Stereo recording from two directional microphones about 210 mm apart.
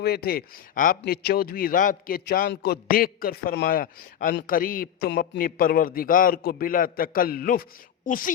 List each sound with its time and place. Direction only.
0.0 s a woman's voice: 45° left (ahead or behind)